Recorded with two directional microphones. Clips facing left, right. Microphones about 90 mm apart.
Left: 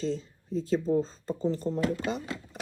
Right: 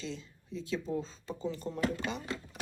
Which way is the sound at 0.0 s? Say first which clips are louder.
Left 10 dB; 40° left (ahead or behind).